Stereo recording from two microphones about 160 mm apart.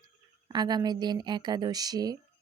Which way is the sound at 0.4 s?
25° right (ahead or behind).